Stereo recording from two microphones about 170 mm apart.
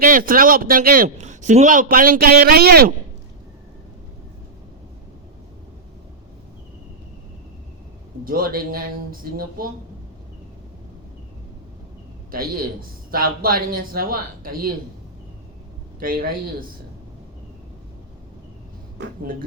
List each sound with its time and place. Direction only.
0.0 s a man's voice: 55° right (ahead or behind)
8.2 s a man's voice: 55° right (ahead or behind)
12.3 s a man's voice: 60° right (ahead or behind)
16.0 s a man's voice: 60° right (ahead or behind)